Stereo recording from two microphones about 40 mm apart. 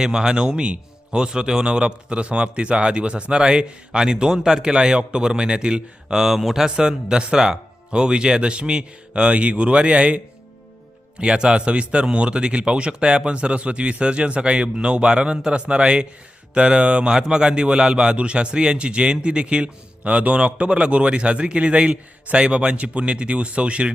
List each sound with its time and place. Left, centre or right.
0.0 s a man's voice: centre
6.7 s a man's voice: centre
11.2 s a man's voice: right